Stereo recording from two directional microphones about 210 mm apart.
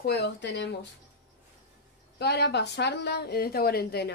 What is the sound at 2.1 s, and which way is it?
Speech, 50° left (ahead or behind).